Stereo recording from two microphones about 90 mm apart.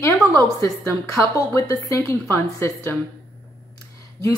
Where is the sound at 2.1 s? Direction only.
35° left (ahead or behind).